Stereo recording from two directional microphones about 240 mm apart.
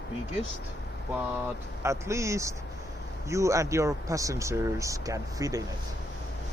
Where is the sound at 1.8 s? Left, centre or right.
Centre.